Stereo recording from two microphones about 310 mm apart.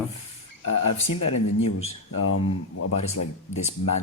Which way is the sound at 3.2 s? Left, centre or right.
Left.